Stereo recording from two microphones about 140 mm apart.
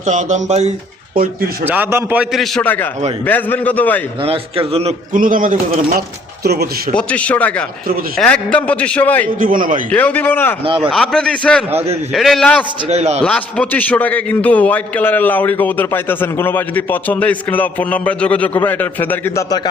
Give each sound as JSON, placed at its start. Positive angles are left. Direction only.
{"t": 0.0, "sound": "speech", "side_deg": -60}
{"t": 1.6, "sound": "a man's voice", "side_deg": -15}
{"t": 2.3, "sound": "a man's voice", "side_deg": 0}
{"t": 2.6, "sound": "a man's voice", "side_deg": 10}
{"t": 4.2, "sound": "a man's voice", "side_deg": -40}
{"t": 5.1, "sound": "a man's voice", "side_deg": -75}
{"t": 6.9, "sound": "a man's voice", "side_deg": 10}
{"t": 9.4, "sound": "a man's voice", "side_deg": -75}
{"t": 9.9, "sound": "a man's voice", "side_deg": 10}
{"t": 10.6, "sound": "a man's voice", "side_deg": -40}
{"t": 10.9, "sound": "a man's voice", "side_deg": 5}
{"t": 12.9, "sound": "a man's voice", "side_deg": -50}
{"t": 13.2, "sound": "a man's voice", "side_deg": 10}